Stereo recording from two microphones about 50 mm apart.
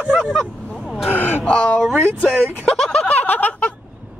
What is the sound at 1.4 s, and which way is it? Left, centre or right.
Speech, left.